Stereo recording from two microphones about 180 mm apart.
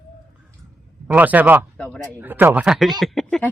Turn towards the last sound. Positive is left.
turn(degrees=0)  # may be behind; listen again after turning